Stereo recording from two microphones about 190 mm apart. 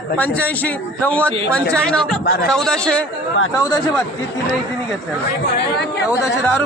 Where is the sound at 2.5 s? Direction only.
5° left (ahead or behind).